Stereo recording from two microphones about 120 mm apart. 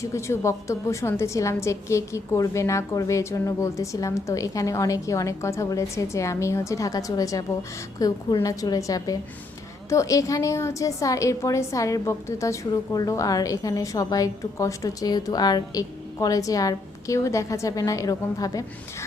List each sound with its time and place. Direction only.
0.0 s a woman's voice: 25° left (ahead or behind)